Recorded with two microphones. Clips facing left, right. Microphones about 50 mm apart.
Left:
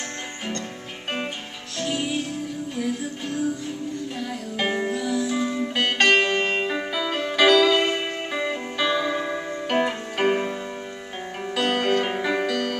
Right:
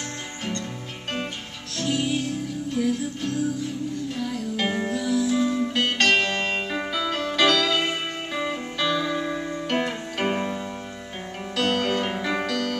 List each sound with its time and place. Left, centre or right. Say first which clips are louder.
1.8 s music: right 1 dB; centre